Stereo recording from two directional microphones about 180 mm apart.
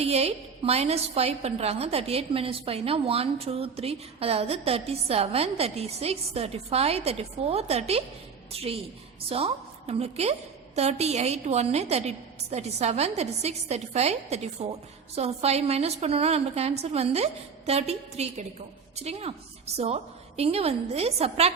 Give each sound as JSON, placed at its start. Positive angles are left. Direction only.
{"t": 0.0, "sound": "a woman's voice", "side_deg": -35}